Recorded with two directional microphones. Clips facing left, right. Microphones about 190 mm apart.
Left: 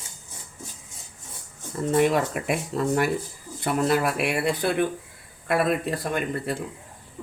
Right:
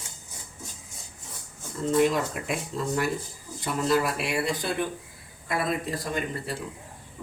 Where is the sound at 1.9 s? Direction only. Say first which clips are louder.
Left 2 dB; 60° left (ahead or behind).